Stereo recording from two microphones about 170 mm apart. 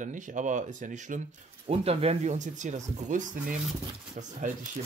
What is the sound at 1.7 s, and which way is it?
Speech, 35° right (ahead or behind).